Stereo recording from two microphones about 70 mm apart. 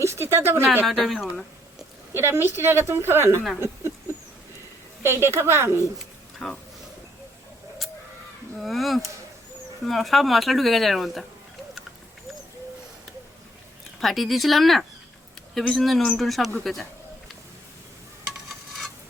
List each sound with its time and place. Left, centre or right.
0.0 s a woman's voice: right
0.9 s speech: centre
2.1 s a woman's voice: right
5.0 s a woman's voice: right
6.4 s speech: centre
8.5 s speech: centre
14.0 s speech: centre